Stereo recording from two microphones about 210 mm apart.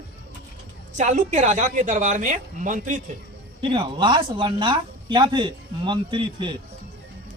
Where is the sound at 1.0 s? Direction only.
35° right (ahead or behind).